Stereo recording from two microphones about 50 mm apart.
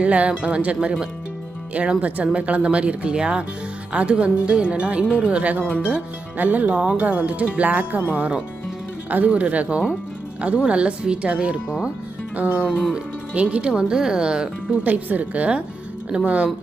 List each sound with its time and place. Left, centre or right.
0.0 s speech: right
14.8 s speech: right